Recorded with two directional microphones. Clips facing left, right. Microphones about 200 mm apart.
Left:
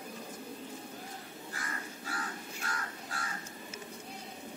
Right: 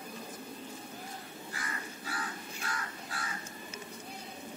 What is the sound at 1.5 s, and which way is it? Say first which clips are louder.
Crow: even; 45° left (ahead or behind).